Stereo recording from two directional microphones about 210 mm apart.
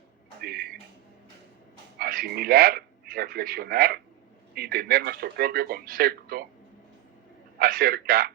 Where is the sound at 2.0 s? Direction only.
45° right (ahead or behind).